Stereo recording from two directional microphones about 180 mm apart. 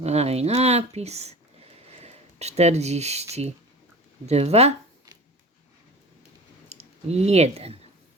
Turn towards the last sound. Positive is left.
turn(degrees=-35)  # may be behind; listen again after turning